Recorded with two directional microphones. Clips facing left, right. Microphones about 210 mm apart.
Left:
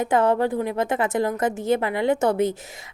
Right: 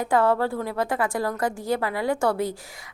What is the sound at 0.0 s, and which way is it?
A woman's voice, 20° left (ahead or behind).